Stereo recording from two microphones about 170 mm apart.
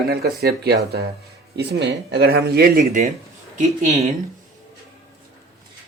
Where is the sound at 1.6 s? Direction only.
85° right.